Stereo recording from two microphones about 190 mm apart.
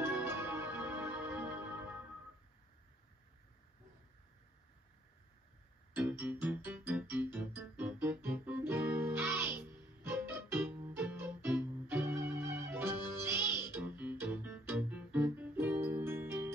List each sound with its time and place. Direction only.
0.0 s music: 10° right (ahead or behind)
5.9 s music: 10° right (ahead or behind)